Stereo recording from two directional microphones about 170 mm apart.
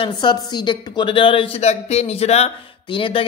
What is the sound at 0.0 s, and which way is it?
A woman's voice, 25° left (ahead or behind).